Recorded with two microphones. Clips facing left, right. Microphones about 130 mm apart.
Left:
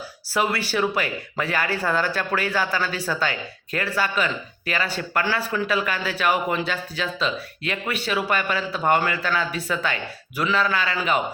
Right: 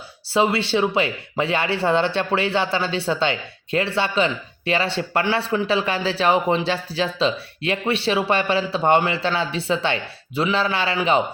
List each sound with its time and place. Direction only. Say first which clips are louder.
0.3 s speech: right 4 dB; 25° right (ahead or behind)